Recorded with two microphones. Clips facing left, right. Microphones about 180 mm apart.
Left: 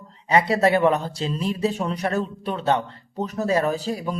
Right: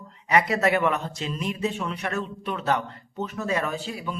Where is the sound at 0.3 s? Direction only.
30° left (ahead or behind).